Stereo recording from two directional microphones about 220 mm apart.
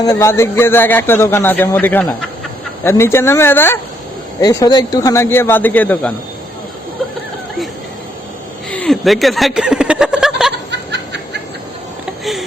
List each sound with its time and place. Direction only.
0.0 s speech: 15° left (ahead or behind)
8.7 s snicker: 5° left (ahead or behind)
10.7 s snicker: 50° right (ahead or behind)
12.2 s a sound: centre (ahead or behind)